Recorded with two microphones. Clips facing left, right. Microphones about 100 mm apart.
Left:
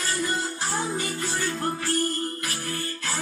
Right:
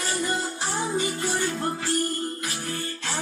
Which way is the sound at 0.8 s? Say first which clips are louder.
Right 4 dB; 20° right (ahead or behind).